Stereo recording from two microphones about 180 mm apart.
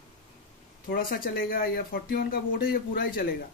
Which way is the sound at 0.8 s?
55° left (ahead or behind).